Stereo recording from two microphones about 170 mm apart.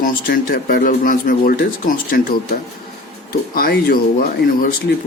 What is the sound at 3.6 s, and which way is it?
Speech, 60° left (ahead or behind).